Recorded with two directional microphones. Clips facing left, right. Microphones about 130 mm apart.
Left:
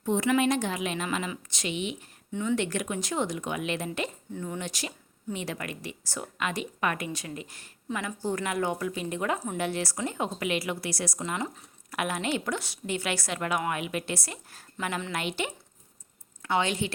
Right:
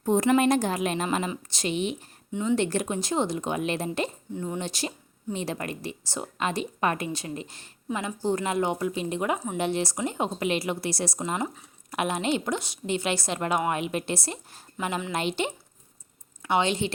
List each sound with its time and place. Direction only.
0.0 s a woman's voice: 40° right (ahead or behind)
4.4 s speech: 20° right (ahead or behind)